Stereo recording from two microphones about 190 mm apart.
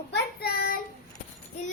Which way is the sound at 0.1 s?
55° left (ahead or behind).